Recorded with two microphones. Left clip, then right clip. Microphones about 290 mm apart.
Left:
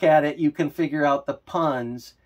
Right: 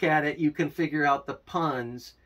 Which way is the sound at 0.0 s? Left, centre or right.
Centre.